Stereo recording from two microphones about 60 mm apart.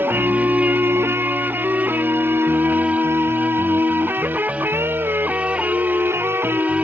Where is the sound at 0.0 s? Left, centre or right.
Right.